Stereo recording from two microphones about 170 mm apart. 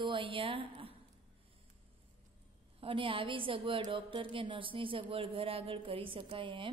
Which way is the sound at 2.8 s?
30° right (ahead or behind).